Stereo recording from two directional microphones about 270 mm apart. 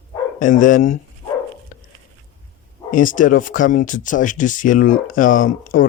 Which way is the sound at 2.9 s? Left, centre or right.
Left.